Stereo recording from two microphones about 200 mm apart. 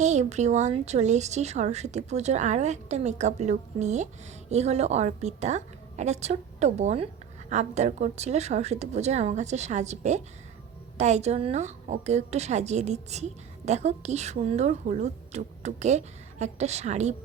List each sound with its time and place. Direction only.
0.0 s speech: 35° right (ahead or behind)